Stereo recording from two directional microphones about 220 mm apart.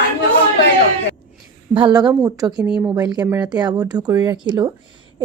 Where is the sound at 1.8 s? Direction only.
20° right (ahead or behind).